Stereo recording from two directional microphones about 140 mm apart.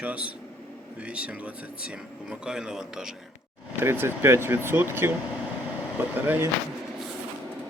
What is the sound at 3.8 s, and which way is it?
Speech, 15° right (ahead or behind).